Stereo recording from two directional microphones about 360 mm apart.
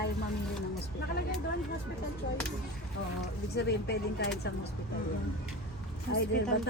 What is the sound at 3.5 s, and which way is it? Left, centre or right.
Speech, left.